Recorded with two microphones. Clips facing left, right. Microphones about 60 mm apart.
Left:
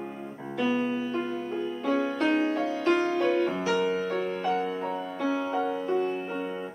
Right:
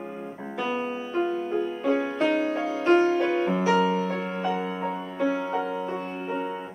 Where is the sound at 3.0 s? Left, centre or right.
Right.